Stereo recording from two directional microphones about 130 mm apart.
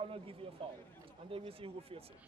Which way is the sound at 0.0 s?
45° right (ahead or behind).